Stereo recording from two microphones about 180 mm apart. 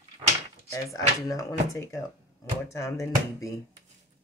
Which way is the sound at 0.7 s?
15° left (ahead or behind).